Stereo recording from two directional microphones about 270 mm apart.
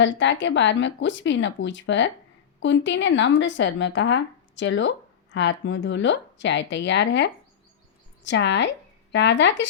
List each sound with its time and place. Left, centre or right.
0.0 s speech: left